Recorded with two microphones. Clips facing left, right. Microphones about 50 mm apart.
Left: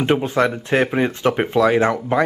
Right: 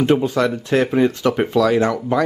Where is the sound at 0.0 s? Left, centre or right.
Left.